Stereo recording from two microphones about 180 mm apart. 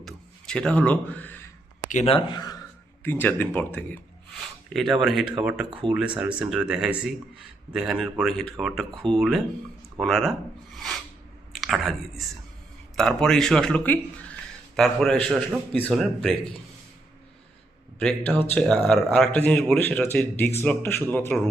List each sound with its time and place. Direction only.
0.0 s a sound: 5° left (ahead or behind)
1.9 s speech: 35° left (ahead or behind)
3.0 s speech: 10° left (ahead or behind)
4.3 s a sound: centre (ahead or behind)
5.4 s speech: 5° right (ahead or behind)
10.8 s filing: centre (ahead or behind)
11.5 s a sound: centre (ahead or behind)
13.0 s speech: centre (ahead or behind)
18.5 s speech: 5° left (ahead or behind)